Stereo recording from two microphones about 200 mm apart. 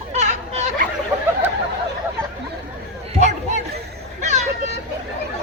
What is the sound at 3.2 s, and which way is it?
Chatter, 35° right (ahead or behind).